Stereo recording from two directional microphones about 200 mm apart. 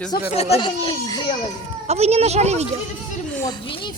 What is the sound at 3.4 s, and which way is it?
Speech, 25° left (ahead or behind).